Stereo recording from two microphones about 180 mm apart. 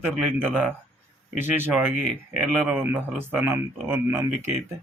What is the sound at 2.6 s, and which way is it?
Speech, 10° right (ahead or behind).